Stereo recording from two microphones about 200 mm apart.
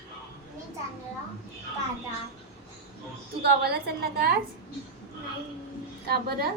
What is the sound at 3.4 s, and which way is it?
A woman's voice, 55° right (ahead or behind).